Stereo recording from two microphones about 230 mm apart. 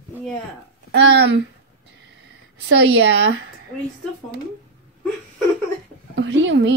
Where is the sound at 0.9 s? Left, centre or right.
Right.